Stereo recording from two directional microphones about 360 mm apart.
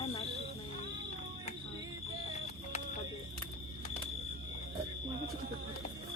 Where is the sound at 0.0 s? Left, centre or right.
Centre.